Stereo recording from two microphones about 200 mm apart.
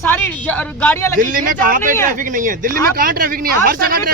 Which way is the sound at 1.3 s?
45° right (ahead or behind).